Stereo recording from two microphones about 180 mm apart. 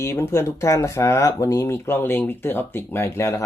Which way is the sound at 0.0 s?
15° left (ahead or behind).